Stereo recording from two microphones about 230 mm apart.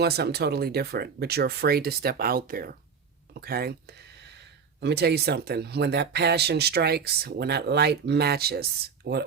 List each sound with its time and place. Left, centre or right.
0.0 s speech: right